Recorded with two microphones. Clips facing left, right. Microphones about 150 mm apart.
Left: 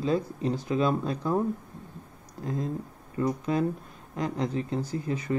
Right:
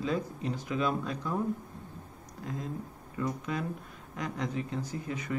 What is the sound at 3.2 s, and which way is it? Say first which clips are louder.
Speech: left 7 dB; 35° left (ahead or behind).